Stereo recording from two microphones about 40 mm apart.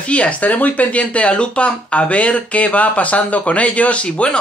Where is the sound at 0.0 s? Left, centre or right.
Left.